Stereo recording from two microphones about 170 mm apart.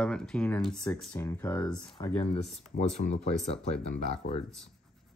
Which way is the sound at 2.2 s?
35° left (ahead or behind).